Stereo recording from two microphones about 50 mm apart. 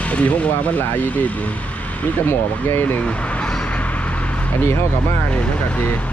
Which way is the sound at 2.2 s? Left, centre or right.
Left.